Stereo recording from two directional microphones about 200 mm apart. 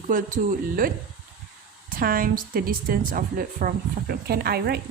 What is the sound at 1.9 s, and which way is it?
A woman's voice, 45° right (ahead or behind).